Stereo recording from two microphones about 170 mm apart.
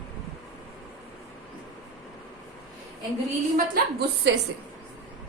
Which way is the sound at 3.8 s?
65° right (ahead or behind).